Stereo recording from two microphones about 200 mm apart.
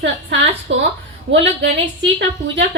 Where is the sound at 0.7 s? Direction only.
65° right (ahead or behind).